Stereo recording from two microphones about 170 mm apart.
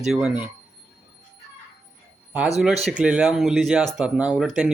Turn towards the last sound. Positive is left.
turn(degrees=-5)  # may be behind; listen again after turning